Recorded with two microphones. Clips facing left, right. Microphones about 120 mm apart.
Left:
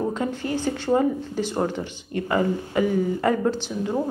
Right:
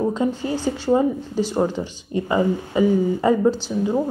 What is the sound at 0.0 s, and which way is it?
A woman's voice, 15° right (ahead or behind).